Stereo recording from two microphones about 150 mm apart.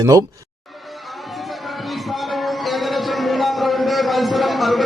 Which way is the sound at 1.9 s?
Centre (ahead or behind).